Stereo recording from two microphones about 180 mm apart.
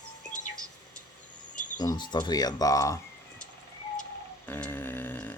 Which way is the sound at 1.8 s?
25° left (ahead or behind).